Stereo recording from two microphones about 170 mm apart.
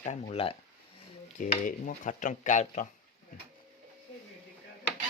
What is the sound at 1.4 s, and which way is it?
Stir, 45° left (ahead or behind).